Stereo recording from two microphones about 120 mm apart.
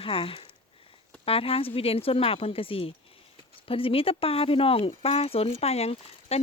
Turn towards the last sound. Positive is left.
turn(degrees=60)  # may be behind; listen again after turning